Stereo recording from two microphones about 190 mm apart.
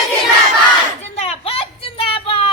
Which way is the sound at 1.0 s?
35° left (ahead or behind).